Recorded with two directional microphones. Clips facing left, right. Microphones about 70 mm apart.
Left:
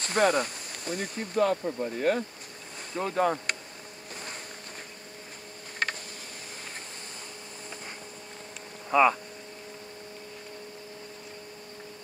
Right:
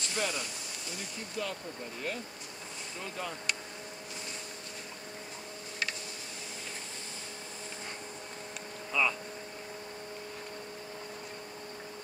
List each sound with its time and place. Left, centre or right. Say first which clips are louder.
0.0 s speech: left 11 dB; left
5.8 s a sound: left 6 dB; left
8.9 s speech: left 9 dB; left